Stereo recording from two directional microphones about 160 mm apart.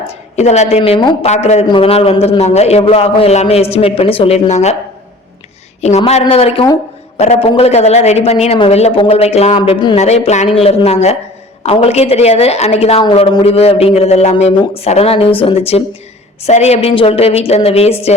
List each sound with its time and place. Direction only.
0.3 s a woman's voice: 45° left (ahead or behind)
0.8 s a man's voice: 30° left (ahead or behind)
1.3 s a man's voice: 45° left (ahead or behind)
5.8 s a man's voice: 45° left (ahead or behind)